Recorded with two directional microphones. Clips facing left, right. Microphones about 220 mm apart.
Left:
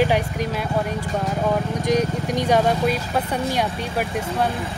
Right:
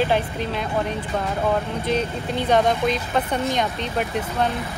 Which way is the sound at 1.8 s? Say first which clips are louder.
Left 3 dB; 15° left (ahead or behind).